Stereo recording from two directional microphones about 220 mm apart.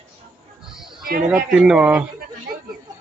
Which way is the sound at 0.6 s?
Centre (ahead or behind).